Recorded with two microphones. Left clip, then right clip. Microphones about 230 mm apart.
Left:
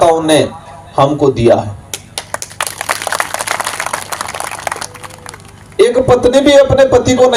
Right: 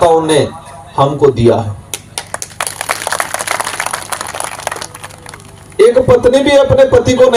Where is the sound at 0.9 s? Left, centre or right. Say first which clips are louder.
Right 1 dB; left.